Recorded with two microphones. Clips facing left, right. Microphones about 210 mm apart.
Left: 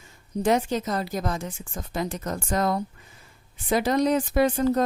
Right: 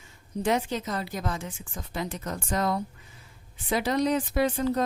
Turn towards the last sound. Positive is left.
turn(degrees=45)  # may be behind; listen again after turning